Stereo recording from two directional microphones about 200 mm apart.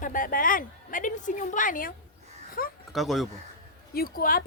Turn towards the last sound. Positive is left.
turn(degrees=45)  # may be behind; listen again after turning